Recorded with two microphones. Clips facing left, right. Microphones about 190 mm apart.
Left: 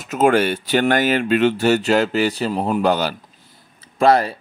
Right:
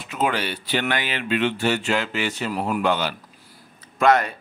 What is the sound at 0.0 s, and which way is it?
Speech, 45° left (ahead or behind).